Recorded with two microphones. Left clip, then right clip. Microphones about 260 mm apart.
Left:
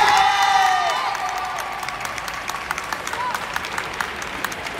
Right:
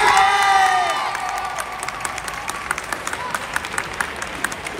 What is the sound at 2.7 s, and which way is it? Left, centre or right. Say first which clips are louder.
Run: right 2 dB; centre.